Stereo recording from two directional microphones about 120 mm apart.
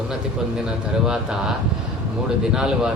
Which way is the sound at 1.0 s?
5° right (ahead or behind).